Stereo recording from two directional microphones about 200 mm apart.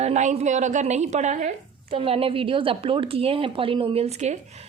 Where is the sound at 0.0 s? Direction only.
35° right (ahead or behind).